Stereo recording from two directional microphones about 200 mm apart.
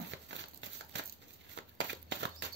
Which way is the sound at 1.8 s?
60° right (ahead or behind).